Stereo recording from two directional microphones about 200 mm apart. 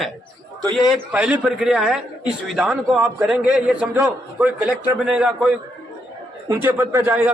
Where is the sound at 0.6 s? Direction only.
20° right (ahead or behind).